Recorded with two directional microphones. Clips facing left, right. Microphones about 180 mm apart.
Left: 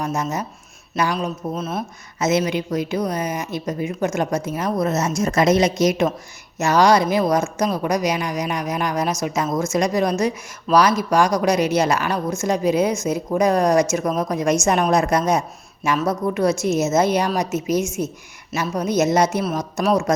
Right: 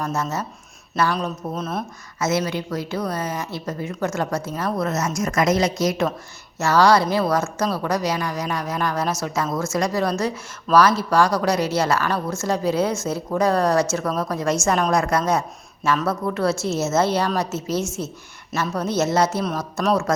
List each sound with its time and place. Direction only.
0.0 s a woman's voice: 15° left (ahead or behind)
2.1 s a woman's voice: 20° left (ahead or behind)